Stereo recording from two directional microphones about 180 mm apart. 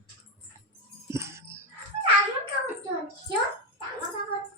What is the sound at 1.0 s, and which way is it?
Music, 15° right (ahead or behind).